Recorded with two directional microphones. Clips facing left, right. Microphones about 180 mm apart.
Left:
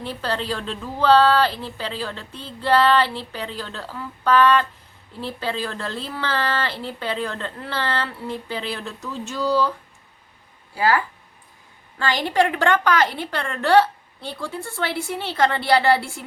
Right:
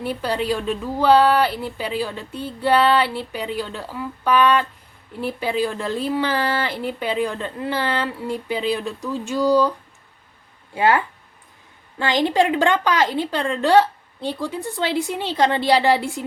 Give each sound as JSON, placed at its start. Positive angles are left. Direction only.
{"t": 0.0, "sound": "speech", "side_deg": -10}
{"t": 10.8, "sound": "speech", "side_deg": -20}